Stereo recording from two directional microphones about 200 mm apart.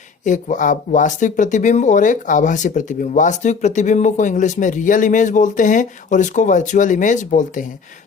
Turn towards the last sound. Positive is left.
turn(degrees=40)  # may be behind; listen again after turning